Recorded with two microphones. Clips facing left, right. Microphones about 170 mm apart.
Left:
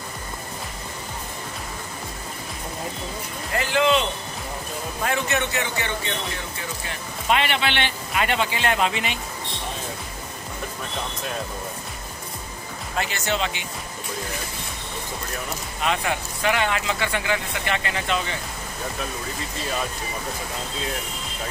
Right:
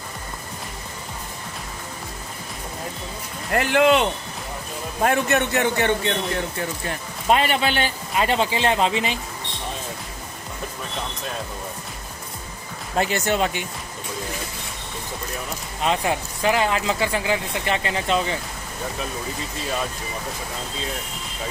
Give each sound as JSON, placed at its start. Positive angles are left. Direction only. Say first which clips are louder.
{"t": 3.5, "sound": "speech", "louder": "right 3 dB", "side_deg": -55}
{"t": 5.0, "sound": "a man's voice", "louder": "right 5 dB", "side_deg": -50}
{"t": 7.2, "sound": "speech", "louder": "right 3 dB", "side_deg": -40}
{"t": 13.0, "sound": "a man's voice", "louder": "right 5 dB", "side_deg": -40}
{"t": 15.8, "sound": "speech", "louder": "right 3 dB", "side_deg": -30}